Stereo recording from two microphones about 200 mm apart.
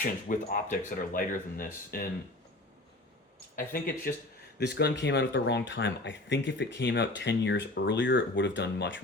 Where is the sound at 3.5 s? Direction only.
45° left (ahead or behind).